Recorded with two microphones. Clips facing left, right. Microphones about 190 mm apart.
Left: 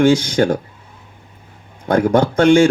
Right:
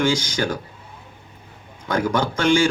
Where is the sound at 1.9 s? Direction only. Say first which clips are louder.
Left 7 dB; 55° left (ahead or behind).